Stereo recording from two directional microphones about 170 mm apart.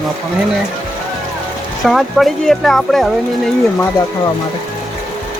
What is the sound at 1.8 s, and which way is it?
Speech, centre (ahead or behind).